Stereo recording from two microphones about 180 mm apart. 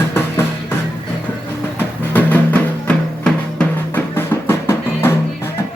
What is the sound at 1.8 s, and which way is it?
Music, 10° left (ahead or behind).